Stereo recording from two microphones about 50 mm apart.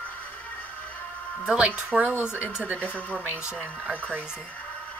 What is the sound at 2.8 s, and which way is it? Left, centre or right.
Speech, left.